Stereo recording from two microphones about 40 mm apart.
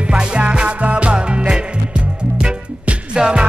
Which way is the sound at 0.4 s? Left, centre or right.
Right.